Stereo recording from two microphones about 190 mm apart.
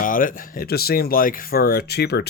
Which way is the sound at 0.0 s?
45° left (ahead or behind).